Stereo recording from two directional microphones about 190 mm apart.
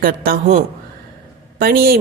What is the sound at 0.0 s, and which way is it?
A woman's voice, 50° right (ahead or behind).